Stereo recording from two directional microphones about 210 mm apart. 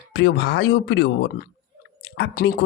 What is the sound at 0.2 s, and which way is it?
Speech, 55° left (ahead or behind).